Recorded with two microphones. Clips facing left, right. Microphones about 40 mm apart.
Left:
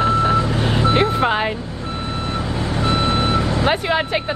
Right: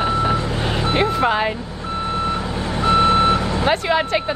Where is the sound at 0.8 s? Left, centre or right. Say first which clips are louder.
Left 3 dB; left.